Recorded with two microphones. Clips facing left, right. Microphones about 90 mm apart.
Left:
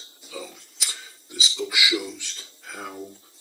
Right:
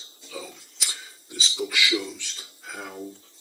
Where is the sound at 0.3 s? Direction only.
Centre (ahead or behind).